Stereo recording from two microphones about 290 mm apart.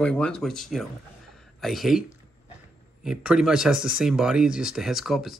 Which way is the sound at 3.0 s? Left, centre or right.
Centre.